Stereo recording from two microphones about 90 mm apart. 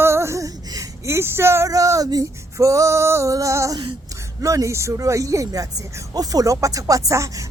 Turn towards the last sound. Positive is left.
turn(degrees=-35)  # may be behind; listen again after turning